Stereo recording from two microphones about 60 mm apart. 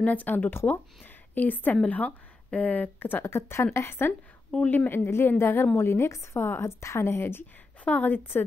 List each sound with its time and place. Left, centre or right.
0.0 s a woman's voice: left
7.8 s a woman's voice: left